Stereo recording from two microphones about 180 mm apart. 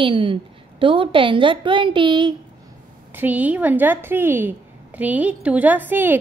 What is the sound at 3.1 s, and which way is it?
A woman's voice, 10° right (ahead or behind).